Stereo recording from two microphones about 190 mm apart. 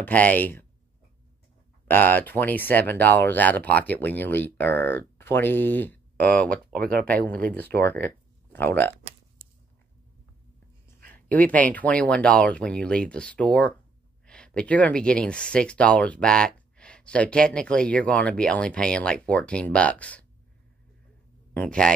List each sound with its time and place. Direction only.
0.0 s speech: 10° left (ahead or behind)
1.9 s speech: 10° left (ahead or behind)
6.7 s speech: 50° right (ahead or behind)
7.5 s speech: 10° left (ahead or behind)
11.2 s speech: 5° left (ahead or behind)
21.5 s speech: 5° left (ahead or behind)